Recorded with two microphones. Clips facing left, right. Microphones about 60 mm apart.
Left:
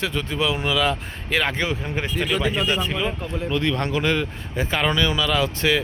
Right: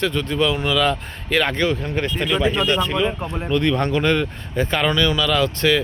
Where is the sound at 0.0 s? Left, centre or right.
Centre.